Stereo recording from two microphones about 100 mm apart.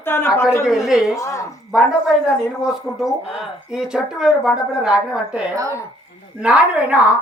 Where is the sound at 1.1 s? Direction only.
30° left (ahead or behind).